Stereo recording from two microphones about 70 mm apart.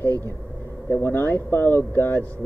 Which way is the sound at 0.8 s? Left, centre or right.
Left.